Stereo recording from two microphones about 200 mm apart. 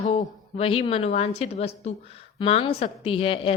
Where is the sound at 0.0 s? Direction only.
35° left (ahead or behind).